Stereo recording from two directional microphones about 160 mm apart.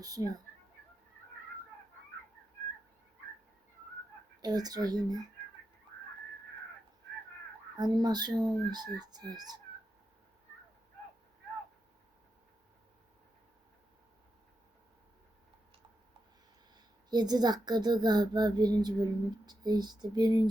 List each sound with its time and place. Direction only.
0.0 s a child's voice: 20° right (ahead or behind)
4.4 s a child's voice: 25° right (ahead or behind)
7.8 s a child's voice: 25° right (ahead or behind)
16.7 s a child's voice: 25° right (ahead or behind)